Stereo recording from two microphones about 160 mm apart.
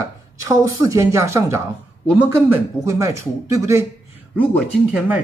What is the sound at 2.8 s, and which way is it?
Speech, 20° right (ahead or behind).